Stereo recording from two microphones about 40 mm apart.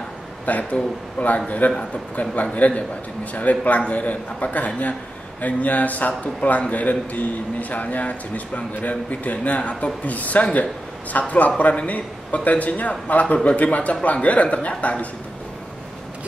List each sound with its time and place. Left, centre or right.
0.5 s a man's voice: left
1.6 s a man's voice: left
2.5 s a man's voice: left